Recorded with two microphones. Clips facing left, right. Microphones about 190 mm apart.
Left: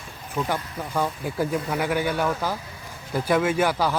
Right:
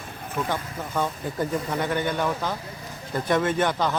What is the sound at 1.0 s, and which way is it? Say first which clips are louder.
A man's voice: left 1 dB; 10° left (ahead or behind).